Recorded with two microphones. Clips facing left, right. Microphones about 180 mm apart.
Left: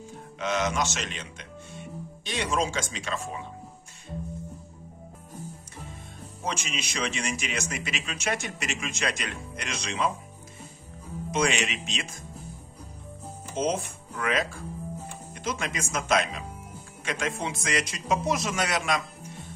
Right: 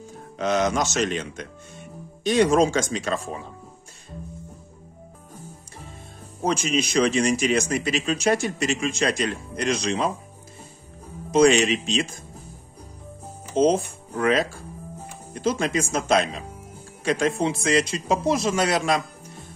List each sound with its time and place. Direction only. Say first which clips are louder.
0.4 s speech: right 5 dB; 35° right (ahead or behind)
6.4 s speech: right 10 dB; 40° right (ahead or behind)
11.3 s speech: right 10 dB; 35° right (ahead or behind)
13.6 s speech: right 9 dB; 30° right (ahead or behind)